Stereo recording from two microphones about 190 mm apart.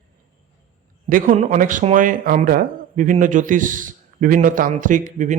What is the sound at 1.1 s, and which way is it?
Speech, 45° right (ahead or behind).